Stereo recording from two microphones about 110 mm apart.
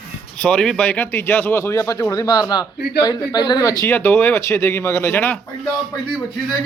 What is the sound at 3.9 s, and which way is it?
A man's voice, 20° left (ahead or behind).